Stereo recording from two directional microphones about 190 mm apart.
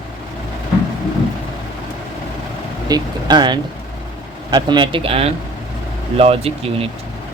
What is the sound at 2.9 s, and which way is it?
Speech, 20° right (ahead or behind).